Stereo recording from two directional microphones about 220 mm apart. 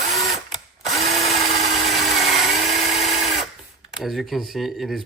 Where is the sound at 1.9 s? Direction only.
Centre (ahead or behind).